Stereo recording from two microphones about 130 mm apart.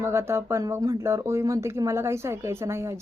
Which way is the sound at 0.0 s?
20° right (ahead or behind).